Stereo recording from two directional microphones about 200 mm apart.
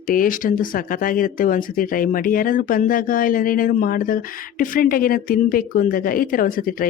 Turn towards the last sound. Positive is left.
turn(degrees=45)  # may be behind; listen again after turning